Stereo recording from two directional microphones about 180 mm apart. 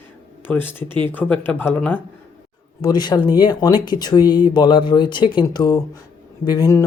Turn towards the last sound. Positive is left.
turn(degrees=20)  # may be behind; listen again after turning